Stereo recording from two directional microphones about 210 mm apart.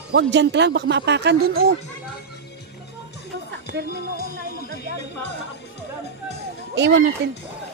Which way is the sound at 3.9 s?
45° left (ahead or behind).